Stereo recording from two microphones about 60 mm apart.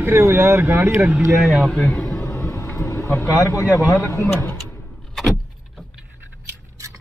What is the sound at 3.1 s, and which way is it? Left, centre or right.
A man's voice, left.